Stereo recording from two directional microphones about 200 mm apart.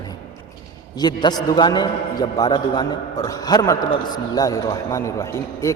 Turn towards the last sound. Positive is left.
turn(degrees=15)  # may be behind; listen again after turning